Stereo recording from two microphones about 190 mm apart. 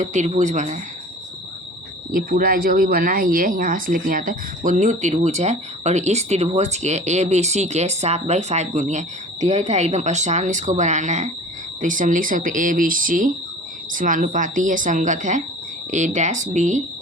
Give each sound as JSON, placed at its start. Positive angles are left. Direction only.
{"t": 0.0, "sound": "speech", "side_deg": -40}
{"t": 2.1, "sound": "speech", "side_deg": -50}